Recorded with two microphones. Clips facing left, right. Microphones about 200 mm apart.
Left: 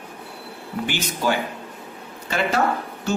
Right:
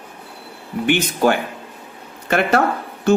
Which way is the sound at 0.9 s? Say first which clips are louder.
Right 8 dB; 60° right (ahead or behind).